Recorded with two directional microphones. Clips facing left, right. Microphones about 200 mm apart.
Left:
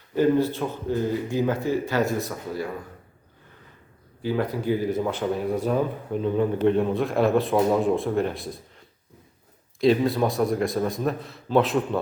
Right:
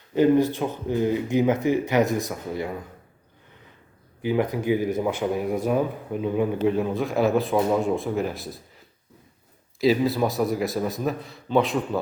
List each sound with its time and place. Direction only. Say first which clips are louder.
0.1 s speech: right 2 dB; 15° right (ahead or behind)
4.2 s a man's voice: right 2 dB; 15° right (ahead or behind)
9.8 s a man's voice: left 1 dB; centre (ahead or behind)